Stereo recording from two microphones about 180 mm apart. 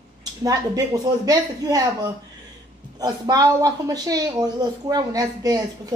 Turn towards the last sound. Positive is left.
turn(degrees=-20)  # may be behind; listen again after turning